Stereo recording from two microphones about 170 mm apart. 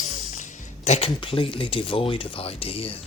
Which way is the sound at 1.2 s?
30° left (ahead or behind).